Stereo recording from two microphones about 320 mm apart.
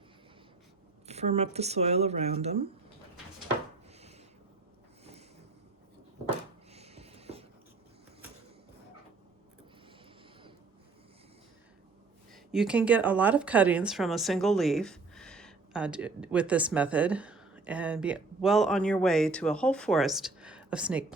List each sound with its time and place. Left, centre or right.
1.0 s speech: centre
6.7 s a sound: centre
12.3 s a woman's voice: centre